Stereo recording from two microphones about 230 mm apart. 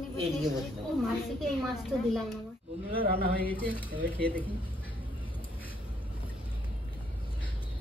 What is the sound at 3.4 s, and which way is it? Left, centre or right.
Speech, centre.